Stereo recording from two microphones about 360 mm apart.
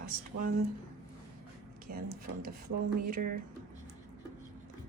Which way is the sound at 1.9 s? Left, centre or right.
Right.